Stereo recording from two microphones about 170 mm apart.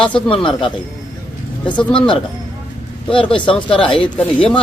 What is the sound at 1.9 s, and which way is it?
Speech, 30° left (ahead or behind).